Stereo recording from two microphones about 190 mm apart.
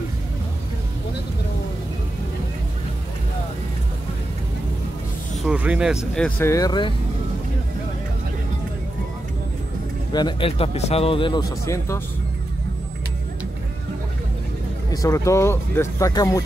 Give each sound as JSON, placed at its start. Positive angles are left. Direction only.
{"t": 5.4, "sound": "speech", "side_deg": -5}
{"t": 6.1, "sound": "speech", "side_deg": 5}
{"t": 10.1, "sound": "speech", "side_deg": 25}
{"t": 11.6, "sound": "speech", "side_deg": 15}
{"t": 14.9, "sound": "speech", "side_deg": 15}